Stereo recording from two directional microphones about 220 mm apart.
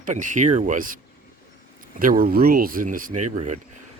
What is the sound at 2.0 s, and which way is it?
Speech, 40° right (ahead or behind).